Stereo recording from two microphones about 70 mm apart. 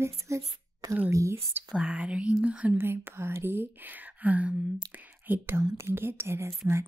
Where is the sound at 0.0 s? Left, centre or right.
Right.